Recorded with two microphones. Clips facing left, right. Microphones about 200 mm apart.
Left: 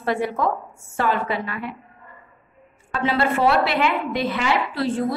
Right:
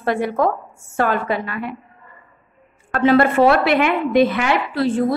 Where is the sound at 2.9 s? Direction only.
50° right (ahead or behind).